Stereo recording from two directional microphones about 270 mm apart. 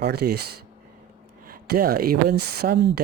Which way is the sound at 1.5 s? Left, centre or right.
Right.